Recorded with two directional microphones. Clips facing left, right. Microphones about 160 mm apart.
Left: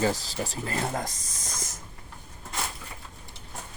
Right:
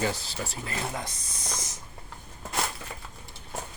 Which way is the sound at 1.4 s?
50° left (ahead or behind).